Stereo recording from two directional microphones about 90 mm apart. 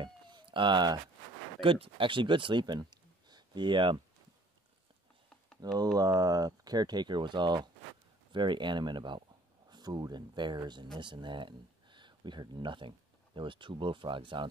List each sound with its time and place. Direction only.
0.0 s cat: 65° right (ahead or behind)
1.6 s speech: 80° right; by 4.0 s 60° right (ahead or behind)
5.6 s speech: 45° right (ahead or behind); by 14.5 s 65° right (ahead or behind)